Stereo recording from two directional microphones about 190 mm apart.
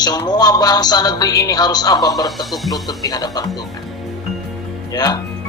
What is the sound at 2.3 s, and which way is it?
Speech, centre (ahead or behind).